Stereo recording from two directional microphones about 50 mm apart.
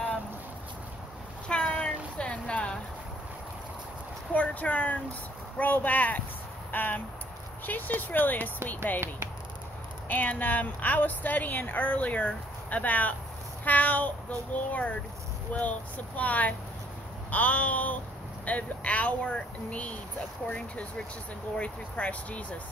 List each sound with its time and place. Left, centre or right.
1.5 s a sound: left
4.3 s a woman's voice: left
10.0 s a woman's voice: left